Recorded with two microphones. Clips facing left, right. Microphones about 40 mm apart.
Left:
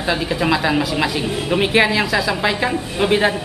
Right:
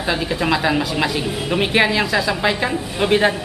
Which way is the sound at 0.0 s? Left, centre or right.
Centre.